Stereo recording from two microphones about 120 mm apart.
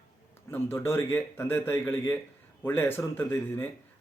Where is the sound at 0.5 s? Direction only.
20° left (ahead or behind).